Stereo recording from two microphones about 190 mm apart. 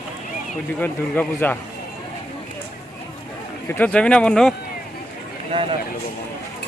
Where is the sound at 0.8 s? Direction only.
10° left (ahead or behind).